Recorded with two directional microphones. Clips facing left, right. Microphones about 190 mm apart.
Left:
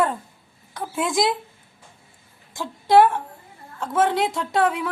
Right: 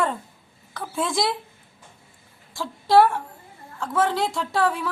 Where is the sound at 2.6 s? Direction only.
20° left (ahead or behind).